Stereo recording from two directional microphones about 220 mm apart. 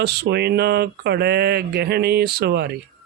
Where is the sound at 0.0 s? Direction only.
50° right (ahead or behind).